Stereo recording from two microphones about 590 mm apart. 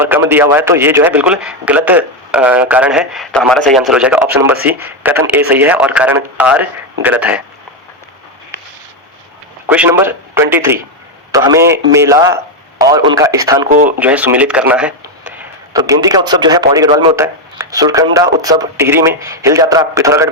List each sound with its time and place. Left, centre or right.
0.0 s speech: centre
9.6 s a man's voice: centre